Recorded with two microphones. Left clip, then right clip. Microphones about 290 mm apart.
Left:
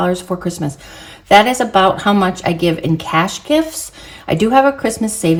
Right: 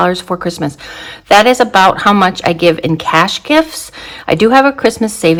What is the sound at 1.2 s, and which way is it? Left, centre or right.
Speech, centre.